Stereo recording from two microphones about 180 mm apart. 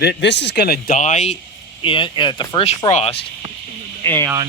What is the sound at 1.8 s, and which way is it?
Speech, 25° left (ahead or behind).